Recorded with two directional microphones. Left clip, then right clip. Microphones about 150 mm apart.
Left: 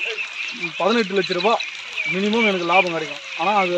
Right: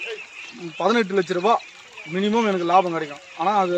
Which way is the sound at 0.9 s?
25° right (ahead or behind).